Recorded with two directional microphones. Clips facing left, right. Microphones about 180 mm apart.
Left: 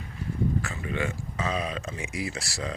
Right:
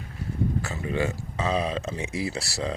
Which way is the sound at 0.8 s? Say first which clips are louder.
Right 3 dB; 35° right (ahead or behind).